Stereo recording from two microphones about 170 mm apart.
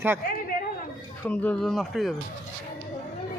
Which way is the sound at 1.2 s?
10° left (ahead or behind).